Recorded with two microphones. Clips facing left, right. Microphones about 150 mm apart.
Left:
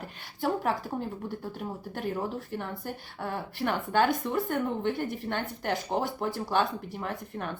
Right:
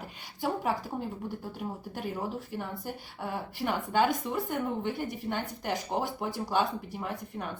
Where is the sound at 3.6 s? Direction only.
10° right (ahead or behind).